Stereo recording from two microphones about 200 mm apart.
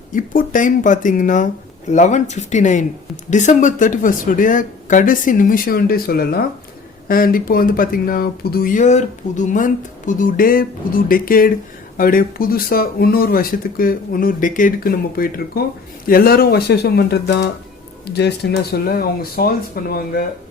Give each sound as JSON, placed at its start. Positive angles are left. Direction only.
{"t": 0.1, "sound": "speech", "side_deg": 40}